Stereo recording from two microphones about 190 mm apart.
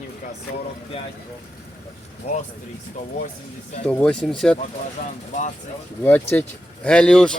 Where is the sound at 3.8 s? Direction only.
5° left (ahead or behind).